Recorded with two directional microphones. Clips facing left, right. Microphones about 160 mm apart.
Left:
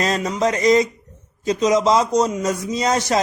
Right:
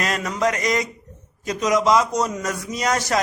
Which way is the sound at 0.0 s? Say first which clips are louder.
Left 3 dB; 25° left (ahead or behind).